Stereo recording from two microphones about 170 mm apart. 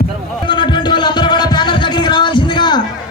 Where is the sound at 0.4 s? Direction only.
25° left (ahead or behind).